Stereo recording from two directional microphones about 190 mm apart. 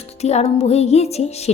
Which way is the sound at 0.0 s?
35° left (ahead or behind).